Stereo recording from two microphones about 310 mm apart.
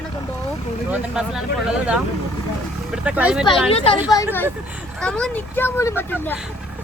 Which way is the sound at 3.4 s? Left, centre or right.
Centre.